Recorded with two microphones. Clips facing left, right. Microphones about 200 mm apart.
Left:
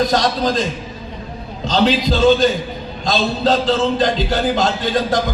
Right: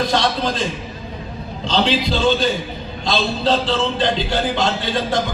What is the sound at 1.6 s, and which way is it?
A man's voice, 40° left (ahead or behind).